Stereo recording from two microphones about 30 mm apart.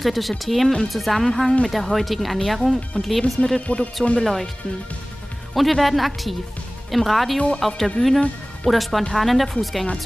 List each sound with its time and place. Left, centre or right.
0.0 s a woman's voice: centre
3.8 s speech: left
4.2 s speech: centre
5.5 s a woman's voice: centre
7.3 s speech: left
8.0 s speech: centre
8.6 s a woman's voice: centre